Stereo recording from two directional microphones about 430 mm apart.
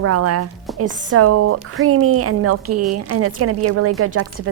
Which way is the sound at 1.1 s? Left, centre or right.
Right.